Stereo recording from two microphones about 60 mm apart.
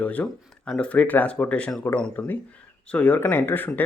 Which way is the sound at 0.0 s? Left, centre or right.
Left.